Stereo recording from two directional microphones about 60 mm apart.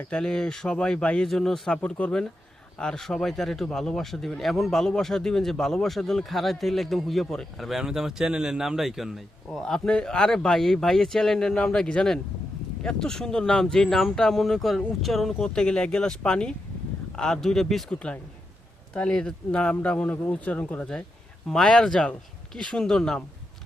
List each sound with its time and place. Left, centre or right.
0.1 s speech: centre
1.3 s speech: centre
1.7 s speech: centre
7.8 s a man's voice: centre
9.8 s speech: centre
15.4 s speech: centre
17.8 s speech: centre
21.5 s speech: centre